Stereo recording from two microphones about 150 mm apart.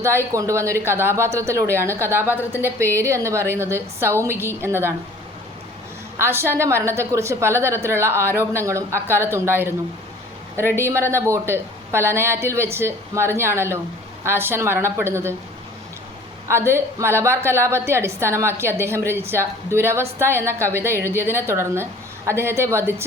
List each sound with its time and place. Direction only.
0.0 s speech: 15° right (ahead or behind)
6.1 s speech: 15° right (ahead or behind)
10.8 s speech: 15° right (ahead or behind)
16.5 s speech: 15° right (ahead or behind)